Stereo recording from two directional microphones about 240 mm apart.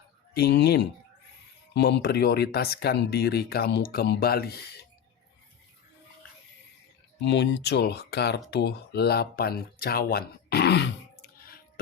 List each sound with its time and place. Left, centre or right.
0.3 s speech: left
7.2 s speech: left